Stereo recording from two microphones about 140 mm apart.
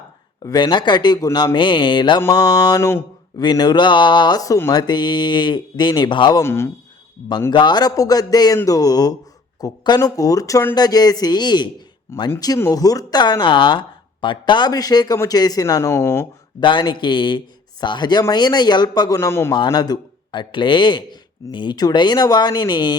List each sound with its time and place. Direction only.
0.4 s a man's voice: 30° left (ahead or behind)
2.2 s mantra: 25° left (ahead or behind)
3.4 s a man's voice: 30° left (ahead or behind)
6.4 s speech: 20° left (ahead or behind)
7.5 s speech: 30° left (ahead or behind)
12.1 s speech: 15° left (ahead or behind)
16.6 s a man's voice: 35° left (ahead or behind)